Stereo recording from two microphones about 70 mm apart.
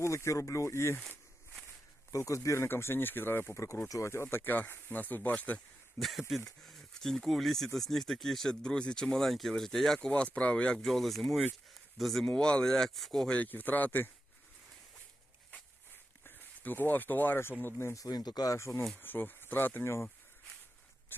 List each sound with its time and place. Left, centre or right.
0.0 s speech: left
2.1 s speech: left
2.6 s speech: left
6.0 s speech: centre
10.1 s speech: centre
10.8 s speech: centre
11.7 s a sound: centre
12.2 s speech: centre
13.4 s speech: left
16.2 s speech: left
17.9 s speech: left
18.5 s speech: left
18.9 s speech: left
21.1 s a sound: left